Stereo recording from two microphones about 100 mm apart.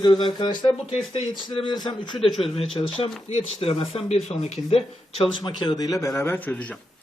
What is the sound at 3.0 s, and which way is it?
Speech, 80° left.